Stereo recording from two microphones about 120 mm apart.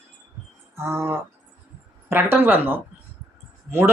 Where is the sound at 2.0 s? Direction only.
20° right (ahead or behind).